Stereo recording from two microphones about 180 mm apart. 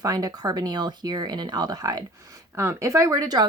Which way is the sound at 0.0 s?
20° right (ahead or behind).